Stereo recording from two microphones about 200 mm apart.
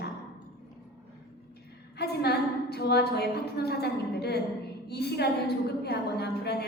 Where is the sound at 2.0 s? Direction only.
55° left (ahead or behind).